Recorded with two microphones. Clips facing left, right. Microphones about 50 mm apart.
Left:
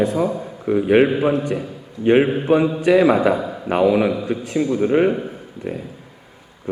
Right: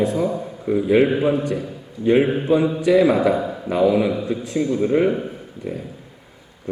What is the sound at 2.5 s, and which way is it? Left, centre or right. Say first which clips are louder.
A man's voice: left 2 dB; left.